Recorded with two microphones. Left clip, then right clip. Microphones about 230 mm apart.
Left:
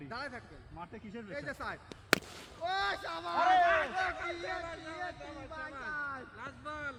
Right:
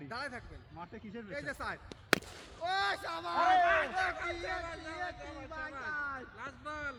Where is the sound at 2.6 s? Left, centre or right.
Centre.